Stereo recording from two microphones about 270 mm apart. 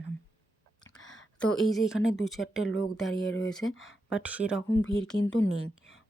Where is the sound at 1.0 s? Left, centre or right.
Left.